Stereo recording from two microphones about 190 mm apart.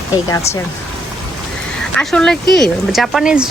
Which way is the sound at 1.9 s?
5° left (ahead or behind).